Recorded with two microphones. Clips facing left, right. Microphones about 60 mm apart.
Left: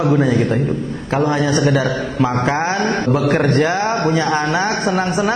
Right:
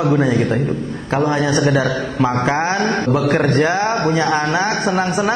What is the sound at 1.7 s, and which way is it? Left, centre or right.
Speech, right.